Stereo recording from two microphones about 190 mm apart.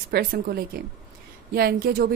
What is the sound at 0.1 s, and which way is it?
A woman's voice, 50° right (ahead or behind).